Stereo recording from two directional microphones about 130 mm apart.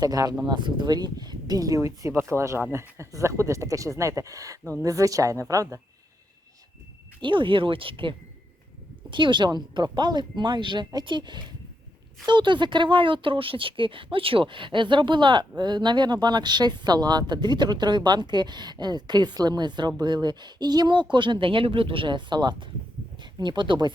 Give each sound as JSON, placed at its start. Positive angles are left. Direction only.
{"t": 0.0, "sound": "speech", "side_deg": -30}
{"t": 7.2, "sound": "speech", "side_deg": -40}